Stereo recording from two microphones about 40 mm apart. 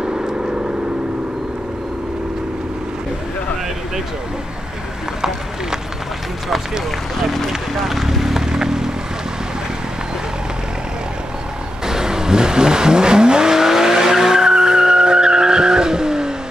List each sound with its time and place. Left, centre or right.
0.0 s vehicle: centre
7.9 s vehicle: centre
11.8 s vehicle: centre